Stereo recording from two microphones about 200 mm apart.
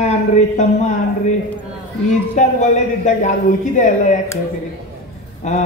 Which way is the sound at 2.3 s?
35° left (ahead or behind).